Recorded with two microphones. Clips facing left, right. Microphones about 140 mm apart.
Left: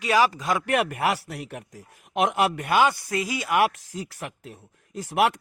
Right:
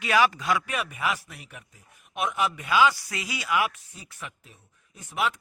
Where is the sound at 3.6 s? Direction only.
80° left.